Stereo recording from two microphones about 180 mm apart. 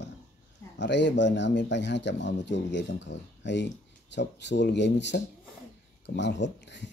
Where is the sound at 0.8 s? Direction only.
80° left.